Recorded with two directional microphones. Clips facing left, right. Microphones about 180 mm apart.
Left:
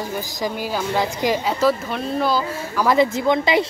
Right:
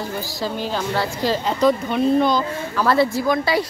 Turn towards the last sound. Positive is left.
turn(degrees=20)  # may be behind; listen again after turning